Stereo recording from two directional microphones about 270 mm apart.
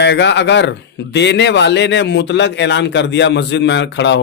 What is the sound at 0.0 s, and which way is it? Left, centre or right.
Speech, left.